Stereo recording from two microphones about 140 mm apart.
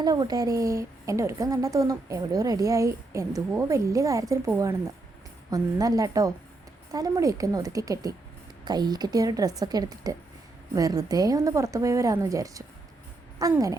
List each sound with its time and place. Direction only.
0.0 s a woman's voice: 30° right (ahead or behind)